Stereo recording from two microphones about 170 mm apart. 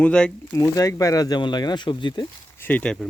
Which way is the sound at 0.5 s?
20° left (ahead or behind).